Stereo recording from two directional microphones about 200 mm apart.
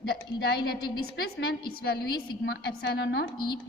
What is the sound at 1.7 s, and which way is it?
A woman's voice, 50° left (ahead or behind).